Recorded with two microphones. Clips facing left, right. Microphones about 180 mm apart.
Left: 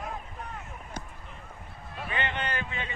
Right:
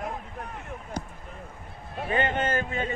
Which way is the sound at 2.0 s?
40° right (ahead or behind).